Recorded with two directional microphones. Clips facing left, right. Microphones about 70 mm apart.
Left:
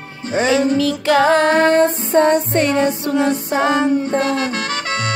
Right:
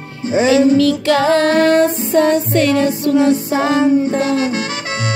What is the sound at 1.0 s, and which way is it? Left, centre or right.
Music, centre.